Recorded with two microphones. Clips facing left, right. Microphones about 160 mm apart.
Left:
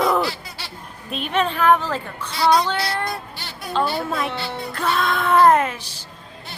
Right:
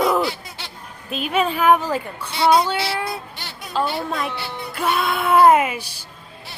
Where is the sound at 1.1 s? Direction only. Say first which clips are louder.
Right 1 dB; 5° right (ahead or behind).